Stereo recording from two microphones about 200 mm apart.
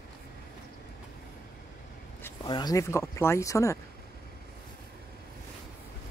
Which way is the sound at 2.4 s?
20° left (ahead or behind).